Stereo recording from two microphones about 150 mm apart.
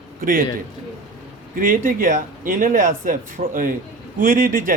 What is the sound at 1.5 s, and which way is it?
A man's voice, 65° right (ahead or behind).